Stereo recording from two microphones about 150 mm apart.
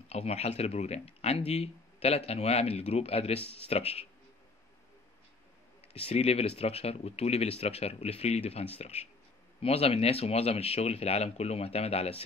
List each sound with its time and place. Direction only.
0.1 s speech: 45° left (ahead or behind)
6.0 s speech: 40° left (ahead or behind)